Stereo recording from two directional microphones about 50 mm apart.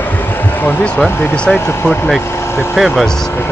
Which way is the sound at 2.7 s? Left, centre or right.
Centre.